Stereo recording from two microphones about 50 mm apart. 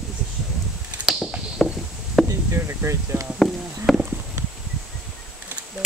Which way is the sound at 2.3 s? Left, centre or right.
Right.